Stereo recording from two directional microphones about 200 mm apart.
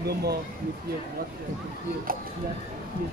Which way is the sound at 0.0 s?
50° right (ahead or behind).